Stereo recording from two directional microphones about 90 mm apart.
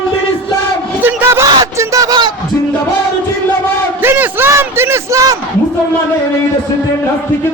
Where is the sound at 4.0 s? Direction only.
20° right (ahead or behind); by 5.3 s 35° right (ahead or behind).